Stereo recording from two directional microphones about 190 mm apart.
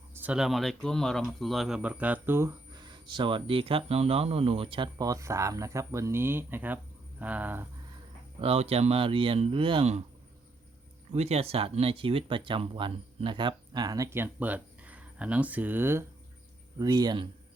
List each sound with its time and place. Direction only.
0.2 s speech: 5° right (ahead or behind)
8.4 s speech: 30° right (ahead or behind)
11.1 s speech: 35° right (ahead or behind)